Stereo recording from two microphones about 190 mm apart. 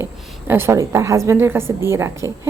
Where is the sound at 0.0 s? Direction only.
10° right (ahead or behind).